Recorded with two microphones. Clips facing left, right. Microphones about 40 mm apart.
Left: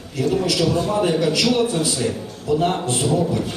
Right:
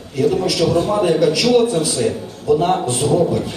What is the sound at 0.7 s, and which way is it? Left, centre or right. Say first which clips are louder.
Speech: right 4 dB; right.